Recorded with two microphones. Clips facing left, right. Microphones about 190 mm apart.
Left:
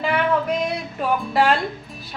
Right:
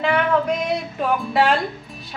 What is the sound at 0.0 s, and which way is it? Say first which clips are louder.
Music: right 2 dB; centre (ahead or behind).